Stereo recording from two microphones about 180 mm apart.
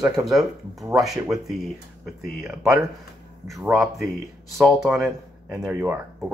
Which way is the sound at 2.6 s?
15° right (ahead or behind).